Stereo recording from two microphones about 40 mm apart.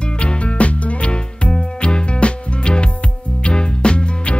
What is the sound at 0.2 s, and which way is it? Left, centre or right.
Music, left.